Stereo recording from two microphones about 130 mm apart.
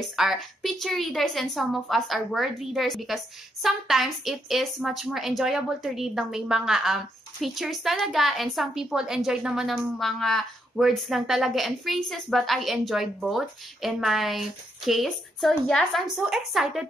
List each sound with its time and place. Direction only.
0.0 s a woman's voice: centre (ahead or behind)